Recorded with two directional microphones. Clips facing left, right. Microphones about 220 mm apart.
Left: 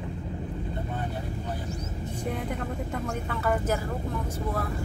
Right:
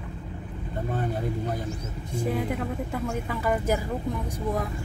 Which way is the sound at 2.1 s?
5° right (ahead or behind).